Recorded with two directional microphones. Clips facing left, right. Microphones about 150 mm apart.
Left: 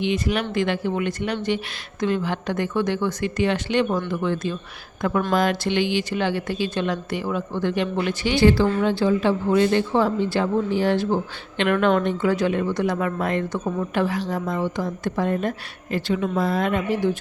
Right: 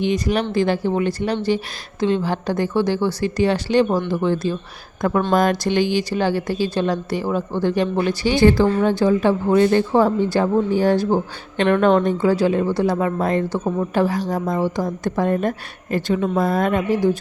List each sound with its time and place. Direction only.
0.0 s speech: 40° right (ahead or behind)
5.3 s speech: 45° right (ahead or behind)